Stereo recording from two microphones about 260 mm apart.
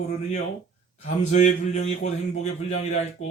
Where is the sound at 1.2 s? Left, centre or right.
Left.